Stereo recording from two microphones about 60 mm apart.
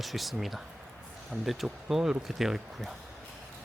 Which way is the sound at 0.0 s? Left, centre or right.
Centre.